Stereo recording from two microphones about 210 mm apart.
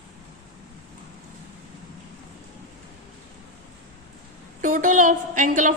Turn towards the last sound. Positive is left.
turn(degrees=-35)  # may be behind; listen again after turning